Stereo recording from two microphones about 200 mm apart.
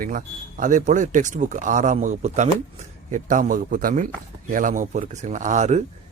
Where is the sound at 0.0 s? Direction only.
45° right (ahead or behind).